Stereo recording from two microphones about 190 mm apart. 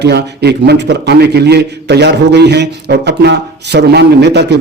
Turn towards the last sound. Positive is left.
turn(degrees=-60)  # may be behind; listen again after turning